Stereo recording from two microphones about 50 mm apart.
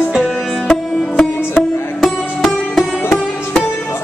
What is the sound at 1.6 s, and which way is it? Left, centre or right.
Music, centre.